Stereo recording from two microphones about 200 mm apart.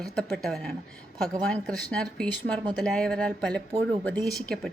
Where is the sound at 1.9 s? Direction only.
5° left (ahead or behind).